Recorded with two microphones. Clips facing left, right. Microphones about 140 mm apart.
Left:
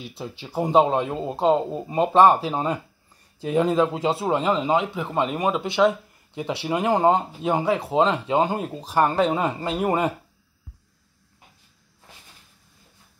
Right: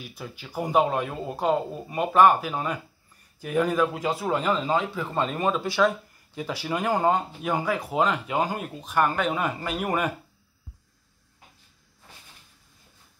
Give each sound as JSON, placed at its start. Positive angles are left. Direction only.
{"t": 0.0, "sound": "speech", "side_deg": 25}